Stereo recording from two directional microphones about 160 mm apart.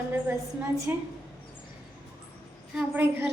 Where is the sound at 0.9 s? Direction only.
10° right (ahead or behind).